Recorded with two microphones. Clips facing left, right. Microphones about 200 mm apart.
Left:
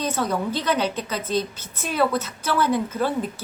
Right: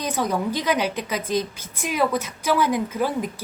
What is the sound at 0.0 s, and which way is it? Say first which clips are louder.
A woman's voice: even; 15° right (ahead or behind).